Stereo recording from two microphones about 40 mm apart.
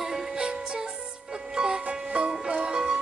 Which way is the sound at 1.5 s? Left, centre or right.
Centre.